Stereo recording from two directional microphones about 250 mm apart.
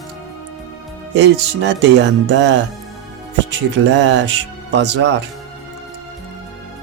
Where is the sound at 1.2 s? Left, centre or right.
Right.